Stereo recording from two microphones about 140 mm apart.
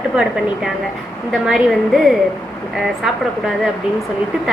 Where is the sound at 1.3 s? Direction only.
5° right (ahead or behind).